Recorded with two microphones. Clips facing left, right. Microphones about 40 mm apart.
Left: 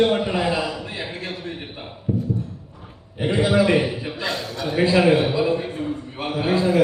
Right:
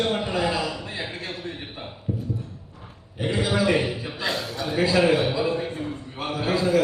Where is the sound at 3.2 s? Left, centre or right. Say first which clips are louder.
Left 5 dB; left.